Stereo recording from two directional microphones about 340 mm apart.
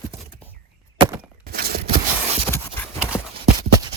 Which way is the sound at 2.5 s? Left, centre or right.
Centre.